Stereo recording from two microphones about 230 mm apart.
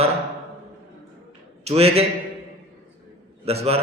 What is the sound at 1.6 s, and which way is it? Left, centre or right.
Speech, right.